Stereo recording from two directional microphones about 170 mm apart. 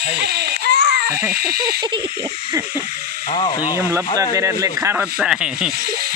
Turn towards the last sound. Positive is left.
turn(degrees=-5)  # may be behind; listen again after turning